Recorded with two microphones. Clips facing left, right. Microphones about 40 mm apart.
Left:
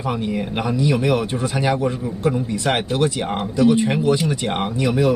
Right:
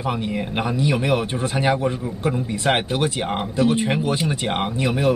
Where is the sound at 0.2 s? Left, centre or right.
Centre.